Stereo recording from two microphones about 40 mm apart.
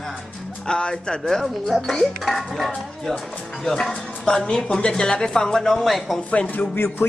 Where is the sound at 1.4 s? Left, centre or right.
Centre.